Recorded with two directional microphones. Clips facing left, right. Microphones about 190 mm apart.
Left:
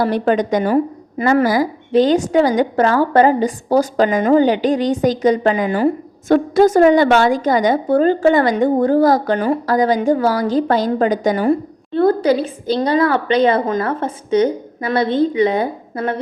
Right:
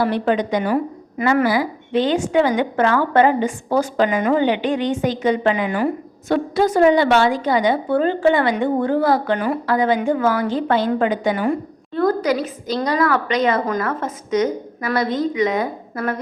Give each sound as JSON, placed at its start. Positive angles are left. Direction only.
{"t": 0.0, "sound": "a woman's voice", "side_deg": 45}
{"t": 11.9, "sound": "a woman's voice", "side_deg": 30}